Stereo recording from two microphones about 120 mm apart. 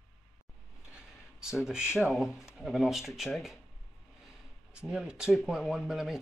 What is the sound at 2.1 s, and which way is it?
Speech, centre (ahead or behind).